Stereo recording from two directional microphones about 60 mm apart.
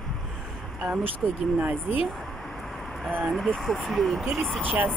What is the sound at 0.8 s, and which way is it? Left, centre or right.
Speech, centre.